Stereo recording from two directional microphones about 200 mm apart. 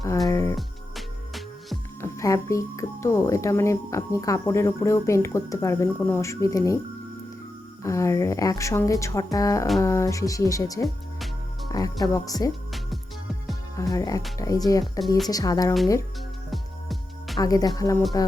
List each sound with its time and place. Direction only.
0.0 s speech: 15° left (ahead or behind)
0.5 s music: centre (ahead or behind)
2.0 s speech: 15° left (ahead or behind)
7.9 s speech: 15° left (ahead or behind)
10.8 s music: centre (ahead or behind)
11.7 s speech: 20° left (ahead or behind)
13.7 s speech: 20° left (ahead or behind)
16.5 s music: centre (ahead or behind)
17.3 s speech: 20° left (ahead or behind)